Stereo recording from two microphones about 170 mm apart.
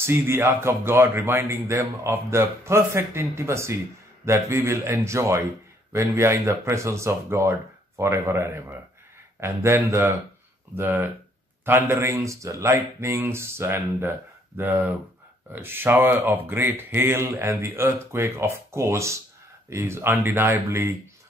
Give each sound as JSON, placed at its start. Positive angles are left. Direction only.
{"t": 0.0, "sound": "speech", "side_deg": -15}